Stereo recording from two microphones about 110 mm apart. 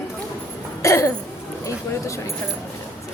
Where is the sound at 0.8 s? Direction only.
30° left (ahead or behind).